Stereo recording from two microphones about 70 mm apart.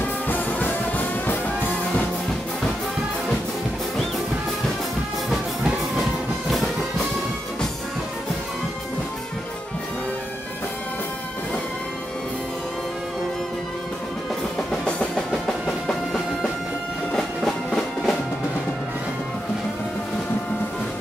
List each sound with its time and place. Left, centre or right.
0.0 s music: left
14.7 s music: centre